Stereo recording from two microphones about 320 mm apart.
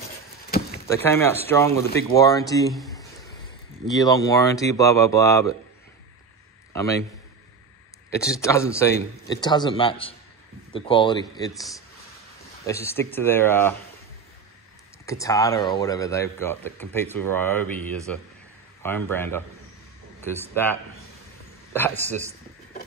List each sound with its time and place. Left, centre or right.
0.8 s a man's voice: centre
4.0 s a man's voice: centre
6.7 s a man's voice: centre
8.1 s a man's voice: centre
12.6 s a man's voice: centre
15.0 s a man's voice: centre
21.9 s a man's voice: right